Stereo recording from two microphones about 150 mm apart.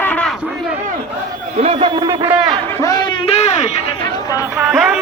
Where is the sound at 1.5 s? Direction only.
40° right (ahead or behind).